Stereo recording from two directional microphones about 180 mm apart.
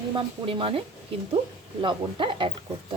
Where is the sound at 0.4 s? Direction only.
30° right (ahead or behind).